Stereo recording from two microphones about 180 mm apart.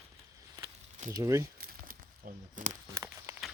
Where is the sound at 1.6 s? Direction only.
50° right (ahead or behind).